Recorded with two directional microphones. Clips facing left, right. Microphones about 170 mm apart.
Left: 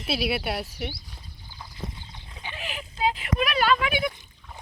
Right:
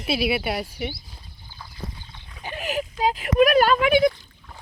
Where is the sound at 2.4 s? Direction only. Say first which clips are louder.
Right 9 dB; 45° right (ahead or behind).